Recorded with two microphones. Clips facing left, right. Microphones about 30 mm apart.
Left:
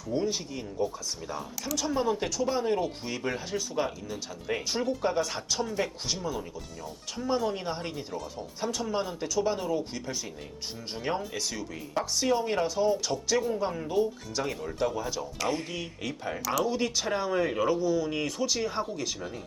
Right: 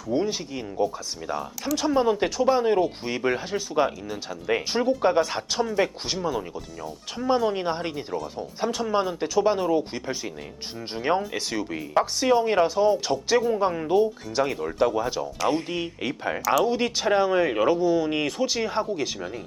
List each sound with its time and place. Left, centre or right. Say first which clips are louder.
0.1 s speech: right 4 dB; right
7.2 s speech: right 6 dB; right